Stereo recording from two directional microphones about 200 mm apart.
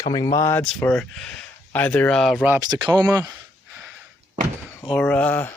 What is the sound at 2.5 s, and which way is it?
Speech, 20° right (ahead or behind).